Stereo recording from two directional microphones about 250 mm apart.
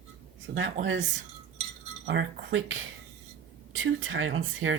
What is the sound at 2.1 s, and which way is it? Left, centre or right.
Speech, right.